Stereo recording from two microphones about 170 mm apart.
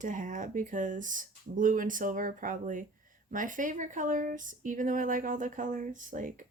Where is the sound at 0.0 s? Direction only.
50° right (ahead or behind).